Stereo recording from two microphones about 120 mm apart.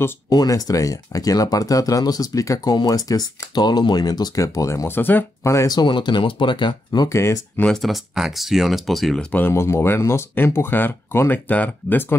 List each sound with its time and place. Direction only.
0.3 s speech: 30° left (ahead or behind)
7.2 s speech: 20° left (ahead or behind)
7.6 s speech: centre (ahead or behind)
9.3 s speech: 20° left (ahead or behind)